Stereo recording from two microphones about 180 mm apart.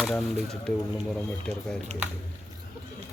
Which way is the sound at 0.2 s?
5° left (ahead or behind).